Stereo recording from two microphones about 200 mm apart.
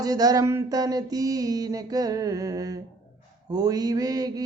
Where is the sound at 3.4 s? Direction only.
20° right (ahead or behind).